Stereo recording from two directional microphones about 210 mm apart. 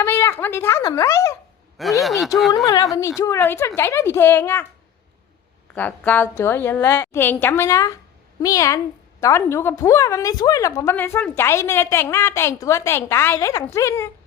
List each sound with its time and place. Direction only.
0.0 s a woman's voice: 10° left (ahead or behind)
1.8 s speech: centre (ahead or behind)
2.6 s a woman's voice: 15° left (ahead or behind)
5.7 s a woman's voice: 10° left (ahead or behind)